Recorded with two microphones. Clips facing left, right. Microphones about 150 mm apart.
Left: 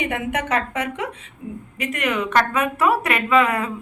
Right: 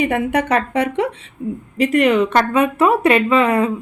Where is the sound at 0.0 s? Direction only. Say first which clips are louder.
Right 7 dB; 35° right (ahead or behind).